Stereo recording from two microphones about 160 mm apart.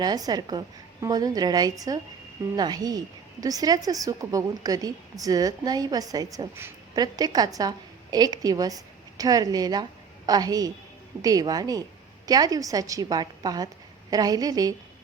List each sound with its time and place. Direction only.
0.0 s a woman's voice: 25° right (ahead or behind)